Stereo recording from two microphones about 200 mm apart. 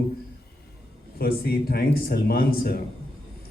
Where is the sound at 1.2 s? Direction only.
50° left (ahead or behind).